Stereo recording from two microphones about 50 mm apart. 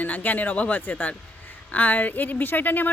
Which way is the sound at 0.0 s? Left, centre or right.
Left.